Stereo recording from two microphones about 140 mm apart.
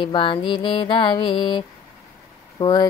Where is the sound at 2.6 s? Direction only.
30° left (ahead or behind).